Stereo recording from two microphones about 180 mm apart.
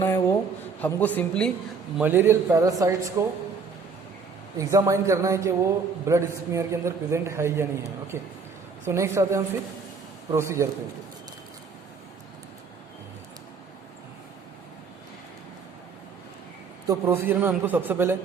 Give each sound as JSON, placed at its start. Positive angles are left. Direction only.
{"t": 0.0, "sound": "a sound", "side_deg": 15}
{"t": 0.8, "sound": "speech", "side_deg": 10}
{"t": 2.0, "sound": "a man's voice", "side_deg": -10}
{"t": 4.5, "sound": "a man's voice", "side_deg": -15}
{"t": 16.8, "sound": "a man's voice", "side_deg": -15}